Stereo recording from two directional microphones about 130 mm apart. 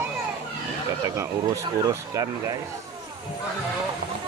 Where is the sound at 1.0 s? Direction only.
25° right (ahead or behind).